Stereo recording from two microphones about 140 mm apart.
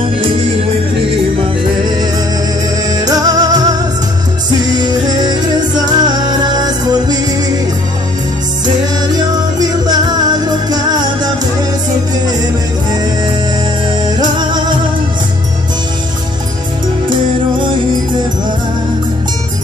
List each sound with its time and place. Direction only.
2.9 s music: 25° right (ahead or behind)
4.7 s music: 30° right (ahead or behind)
9.1 s music: 30° right (ahead or behind)
14.0 s music: 30° right (ahead or behind)